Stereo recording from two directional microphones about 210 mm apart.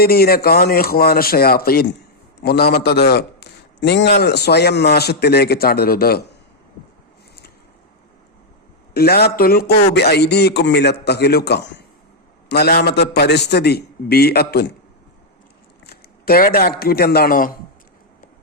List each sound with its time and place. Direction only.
0.0 s a man's voice: 45° left (ahead or behind)
8.9 s a man's voice: 50° left (ahead or behind)
15.9 s speech: 45° left (ahead or behind)